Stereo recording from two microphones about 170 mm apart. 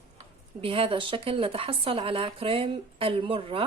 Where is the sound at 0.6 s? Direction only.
35° right (ahead or behind).